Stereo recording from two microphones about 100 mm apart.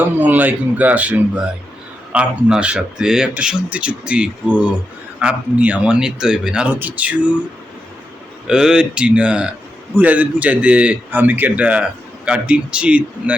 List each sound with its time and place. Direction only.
0.0 s a man's voice: 15° right (ahead or behind)
8.4 s a man's voice: 10° right (ahead or behind)